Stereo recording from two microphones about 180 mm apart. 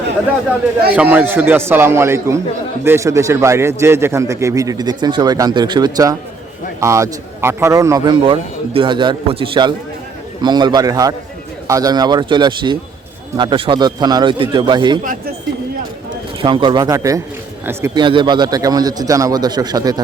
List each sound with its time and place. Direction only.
0.9 s a man's voice: 10° right (ahead or behind); by 14.9 s 25° right (ahead or behind)
16.4 s a man's voice: 25° right (ahead or behind)
18.0 s a man's voice: 25° right (ahead or behind)